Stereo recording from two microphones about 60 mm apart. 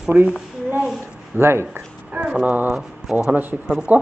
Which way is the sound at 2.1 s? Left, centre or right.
Right.